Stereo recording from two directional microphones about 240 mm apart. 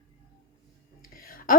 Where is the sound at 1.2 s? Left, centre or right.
Left.